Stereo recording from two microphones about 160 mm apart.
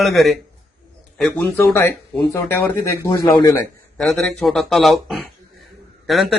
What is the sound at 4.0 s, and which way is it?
Speech, centre (ahead or behind).